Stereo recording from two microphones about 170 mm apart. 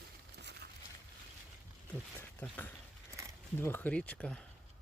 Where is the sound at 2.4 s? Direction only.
10° left (ahead or behind).